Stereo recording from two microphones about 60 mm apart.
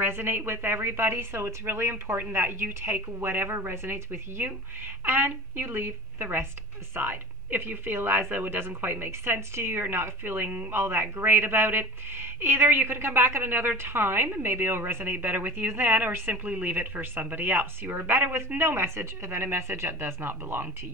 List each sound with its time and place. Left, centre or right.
0.0 s speech: right
10.8 s speech: right